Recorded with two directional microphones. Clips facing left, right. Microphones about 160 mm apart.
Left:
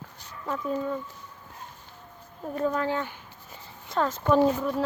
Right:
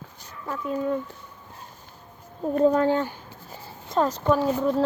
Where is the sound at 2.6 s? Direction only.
30° right (ahead or behind).